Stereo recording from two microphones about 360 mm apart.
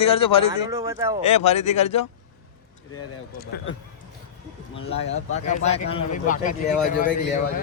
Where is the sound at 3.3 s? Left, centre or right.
Left.